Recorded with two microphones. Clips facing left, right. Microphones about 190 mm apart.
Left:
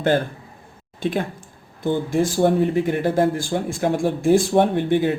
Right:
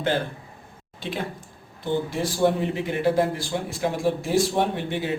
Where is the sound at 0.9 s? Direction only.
50° left (ahead or behind).